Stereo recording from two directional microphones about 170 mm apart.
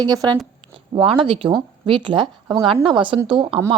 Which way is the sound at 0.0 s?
25° right (ahead or behind).